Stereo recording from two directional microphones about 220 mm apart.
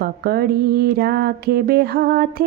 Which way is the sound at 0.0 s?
45° right (ahead or behind).